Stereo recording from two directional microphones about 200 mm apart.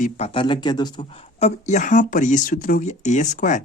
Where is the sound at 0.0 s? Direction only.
30° left (ahead or behind).